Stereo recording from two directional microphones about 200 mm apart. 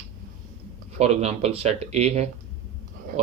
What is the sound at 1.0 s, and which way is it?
Speech, 30° right (ahead or behind).